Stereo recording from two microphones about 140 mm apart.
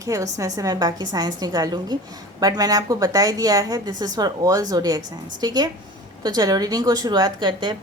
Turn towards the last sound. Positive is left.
turn(degrees=-35)  # may be behind; listen again after turning